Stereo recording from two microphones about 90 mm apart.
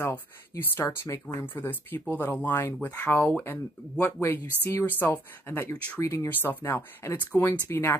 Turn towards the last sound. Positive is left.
turn(degrees=25)  # may be behind; listen again after turning